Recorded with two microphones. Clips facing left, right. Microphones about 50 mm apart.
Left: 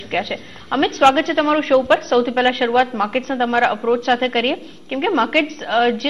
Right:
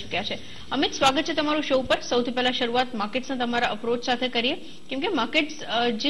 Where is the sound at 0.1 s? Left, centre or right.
Left.